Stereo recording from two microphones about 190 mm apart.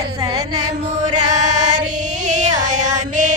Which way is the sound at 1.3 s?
40° right (ahead or behind).